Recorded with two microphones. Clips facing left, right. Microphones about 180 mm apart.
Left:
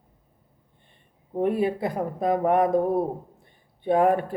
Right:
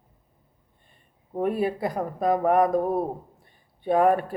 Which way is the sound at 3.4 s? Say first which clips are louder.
Left 1 dB; 25° left (ahead or behind).